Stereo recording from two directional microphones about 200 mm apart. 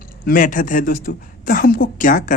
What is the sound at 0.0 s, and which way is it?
Speech, 45° left (ahead or behind).